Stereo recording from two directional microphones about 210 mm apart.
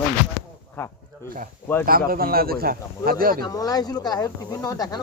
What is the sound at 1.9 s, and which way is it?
Speech, 45° right (ahead or behind).